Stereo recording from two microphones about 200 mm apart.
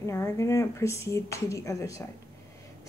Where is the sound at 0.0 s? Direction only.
15° left (ahead or behind).